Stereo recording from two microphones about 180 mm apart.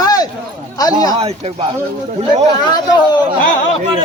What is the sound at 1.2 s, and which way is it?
Speech, 35° right (ahead or behind).